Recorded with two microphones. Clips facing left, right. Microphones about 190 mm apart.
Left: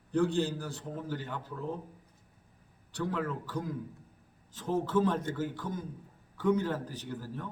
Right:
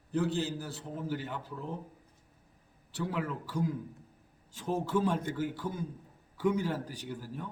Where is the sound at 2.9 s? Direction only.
10° right (ahead or behind).